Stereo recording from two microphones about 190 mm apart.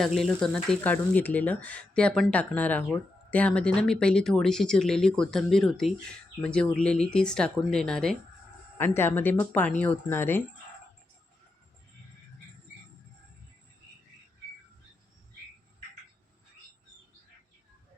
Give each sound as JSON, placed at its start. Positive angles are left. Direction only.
{"t": 0.2, "sound": "speech", "side_deg": 0}